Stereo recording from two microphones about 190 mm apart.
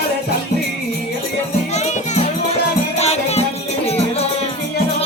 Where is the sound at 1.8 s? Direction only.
40° left (ahead or behind).